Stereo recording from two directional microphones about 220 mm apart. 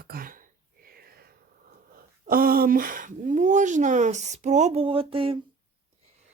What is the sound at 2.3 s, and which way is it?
Speech, 40° right (ahead or behind).